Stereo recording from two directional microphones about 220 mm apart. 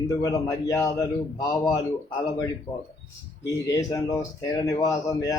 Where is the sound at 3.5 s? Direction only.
15° left (ahead or behind).